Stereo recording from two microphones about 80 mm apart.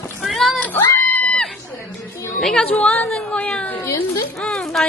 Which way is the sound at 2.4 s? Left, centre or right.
Centre.